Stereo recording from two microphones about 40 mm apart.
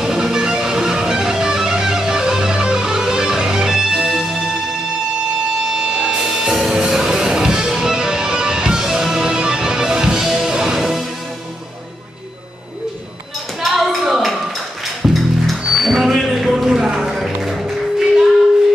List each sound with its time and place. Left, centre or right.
0.0 s music: centre
13.7 s music: centre